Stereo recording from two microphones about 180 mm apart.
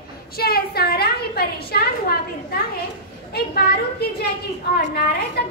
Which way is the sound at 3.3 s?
60° left (ahead or behind).